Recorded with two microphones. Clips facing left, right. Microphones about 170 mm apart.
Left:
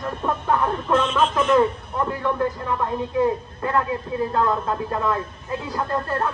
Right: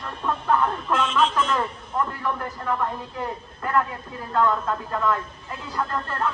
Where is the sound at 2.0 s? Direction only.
25° left (ahead or behind).